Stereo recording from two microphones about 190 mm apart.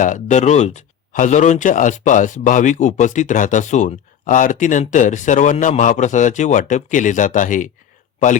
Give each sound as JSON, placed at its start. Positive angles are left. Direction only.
{"t": 0.0, "sound": "speech", "side_deg": 40}